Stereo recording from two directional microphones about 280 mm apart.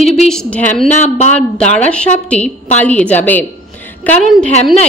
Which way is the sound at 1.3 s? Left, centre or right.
Centre.